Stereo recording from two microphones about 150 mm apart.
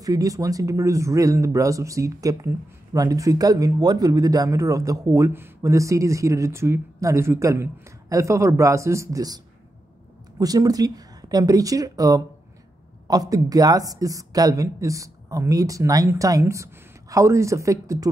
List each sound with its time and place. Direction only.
0.0 s speech: 25° right (ahead or behind)
10.4 s speech: 25° right (ahead or behind)